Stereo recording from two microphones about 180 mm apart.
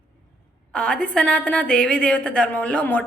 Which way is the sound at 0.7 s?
5° left (ahead or behind).